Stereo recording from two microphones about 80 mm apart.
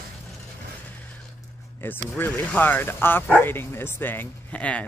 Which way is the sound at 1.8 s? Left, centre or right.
Left.